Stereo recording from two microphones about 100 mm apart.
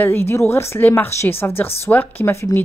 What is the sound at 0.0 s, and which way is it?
Speech, 25° left (ahead or behind).